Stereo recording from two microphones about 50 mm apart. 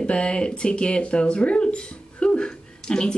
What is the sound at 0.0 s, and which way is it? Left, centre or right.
Speech, centre.